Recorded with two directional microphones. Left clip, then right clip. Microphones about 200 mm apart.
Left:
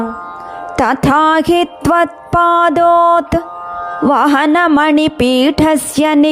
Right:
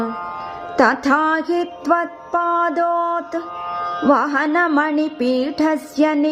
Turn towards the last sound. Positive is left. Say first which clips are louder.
# left 6 dB
turn(degrees=50)  # may be behind; listen again after turning